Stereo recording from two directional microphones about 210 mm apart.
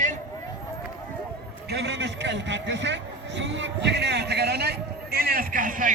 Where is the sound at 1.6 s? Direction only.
50° right (ahead or behind).